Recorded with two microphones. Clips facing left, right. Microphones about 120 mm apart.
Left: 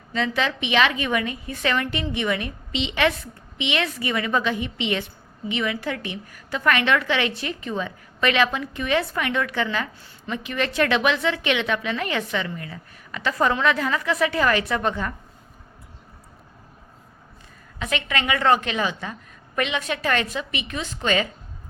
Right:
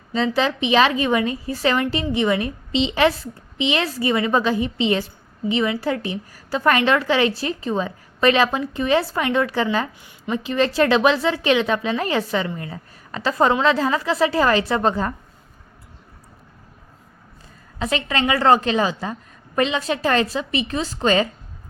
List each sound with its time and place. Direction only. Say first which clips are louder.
0.1 s a woman's voice: right 4 dB; 30° right (ahead or behind)
17.7 s a woman's voice: right 4 dB; 30° right (ahead or behind)